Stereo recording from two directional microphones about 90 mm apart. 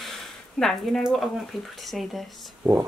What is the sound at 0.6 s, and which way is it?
Speech, 5° left (ahead or behind).